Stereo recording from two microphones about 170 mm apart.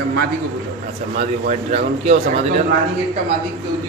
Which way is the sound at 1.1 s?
40° right (ahead or behind).